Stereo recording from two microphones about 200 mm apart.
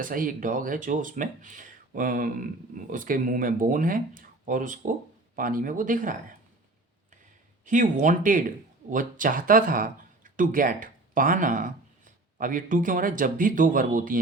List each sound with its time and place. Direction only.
0.0 s speech: 45° right (ahead or behind)
7.6 s speech: 40° right (ahead or behind)